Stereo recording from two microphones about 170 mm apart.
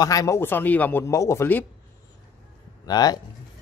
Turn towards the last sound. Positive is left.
turn(degrees=20)  # may be behind; listen again after turning